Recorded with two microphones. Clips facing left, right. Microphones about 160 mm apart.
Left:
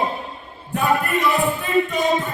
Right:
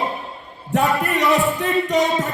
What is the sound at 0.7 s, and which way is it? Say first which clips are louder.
Music: right 1 dB; 80° right.